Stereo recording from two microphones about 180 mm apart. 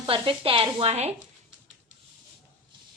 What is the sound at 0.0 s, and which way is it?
A woman's voice, 30° right (ahead or behind).